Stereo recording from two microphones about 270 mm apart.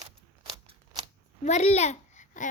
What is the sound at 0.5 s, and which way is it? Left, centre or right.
Scissors, right.